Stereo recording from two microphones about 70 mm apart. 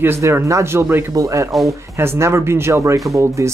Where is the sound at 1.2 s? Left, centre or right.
Right.